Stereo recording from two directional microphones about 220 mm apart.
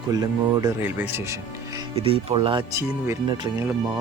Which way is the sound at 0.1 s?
15° right (ahead or behind).